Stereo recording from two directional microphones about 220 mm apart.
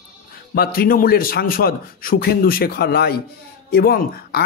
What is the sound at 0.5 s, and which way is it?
Speech, 45° left (ahead or behind).